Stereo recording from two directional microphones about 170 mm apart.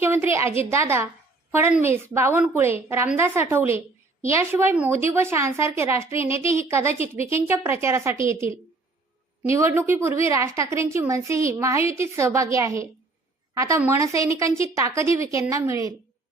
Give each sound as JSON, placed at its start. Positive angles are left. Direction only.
{"t": 0.0, "sound": "a woman's voice", "side_deg": -15}